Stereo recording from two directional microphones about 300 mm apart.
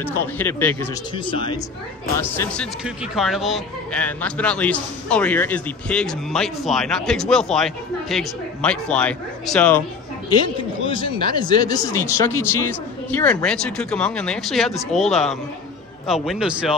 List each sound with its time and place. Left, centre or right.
0.0 s speech: centre
10.4 s speech: centre